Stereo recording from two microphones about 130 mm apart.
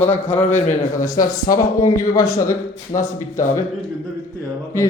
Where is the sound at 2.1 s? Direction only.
25° left (ahead or behind).